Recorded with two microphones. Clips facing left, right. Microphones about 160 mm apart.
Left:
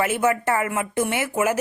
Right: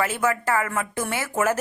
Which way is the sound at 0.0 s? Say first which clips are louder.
Left 3 dB; 20° left (ahead or behind).